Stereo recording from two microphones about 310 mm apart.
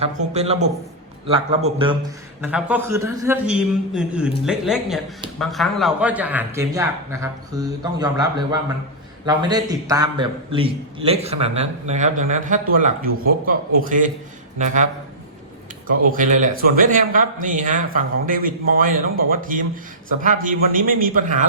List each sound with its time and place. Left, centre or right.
0.0 s a man's voice: centre
2.4 s a man's voice: centre; by 14.8 s right
15.9 s speech: right